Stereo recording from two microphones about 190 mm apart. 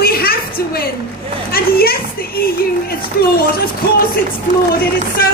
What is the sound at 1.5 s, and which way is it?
Speech, 55° left (ahead or behind).